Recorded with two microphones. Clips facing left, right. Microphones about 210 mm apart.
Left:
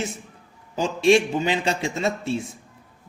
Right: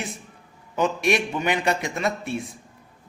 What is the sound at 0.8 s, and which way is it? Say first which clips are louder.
Speech: left 4 dB; 25° left (ahead or behind).